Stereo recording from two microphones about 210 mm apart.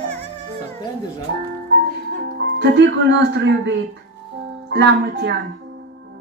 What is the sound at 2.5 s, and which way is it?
Speech, 55° right (ahead or behind).